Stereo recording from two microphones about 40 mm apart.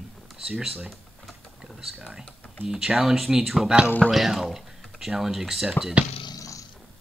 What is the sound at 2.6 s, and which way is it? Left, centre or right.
Speech, centre.